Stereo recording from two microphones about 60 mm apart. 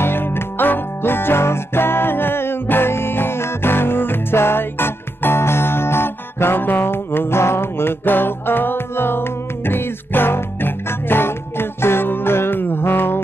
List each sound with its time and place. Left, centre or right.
0.0 s music: left